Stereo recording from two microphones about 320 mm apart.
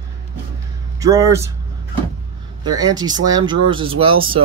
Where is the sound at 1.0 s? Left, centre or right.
Centre.